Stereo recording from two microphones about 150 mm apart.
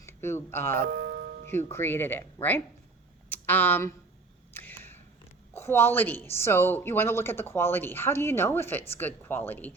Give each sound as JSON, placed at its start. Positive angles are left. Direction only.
{"t": 0.0, "sound": "speech", "side_deg": 15}
{"t": 0.9, "sound": "music", "side_deg": -90}
{"t": 1.7, "sound": "a woman's voice", "side_deg": 15}
{"t": 4.5, "sound": "a sound", "side_deg": 15}
{"t": 5.5, "sound": "a woman's voice", "side_deg": 15}